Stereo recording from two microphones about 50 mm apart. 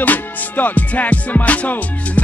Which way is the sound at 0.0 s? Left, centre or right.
Left.